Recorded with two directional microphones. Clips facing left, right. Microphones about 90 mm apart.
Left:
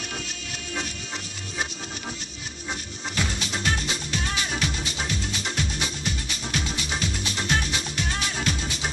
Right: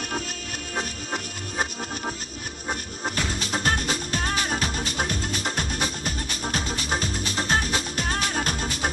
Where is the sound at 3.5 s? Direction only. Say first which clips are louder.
Right 5 dB; 45° right (ahead or behind).